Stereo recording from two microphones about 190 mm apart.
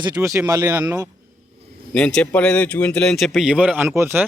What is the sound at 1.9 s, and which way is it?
Speech, 5° left (ahead or behind).